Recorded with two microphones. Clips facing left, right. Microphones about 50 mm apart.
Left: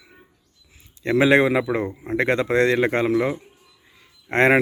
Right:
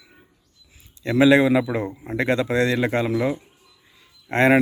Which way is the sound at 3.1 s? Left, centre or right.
Left.